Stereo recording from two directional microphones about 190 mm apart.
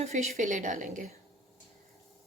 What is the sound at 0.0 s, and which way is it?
A woman's voice, 35° right (ahead or behind).